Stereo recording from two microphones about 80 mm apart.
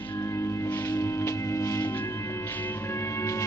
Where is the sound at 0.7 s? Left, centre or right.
Left.